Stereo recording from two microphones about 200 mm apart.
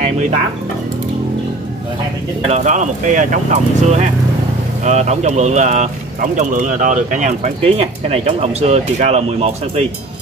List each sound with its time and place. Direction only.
2.4 s speech: 35° right (ahead or behind)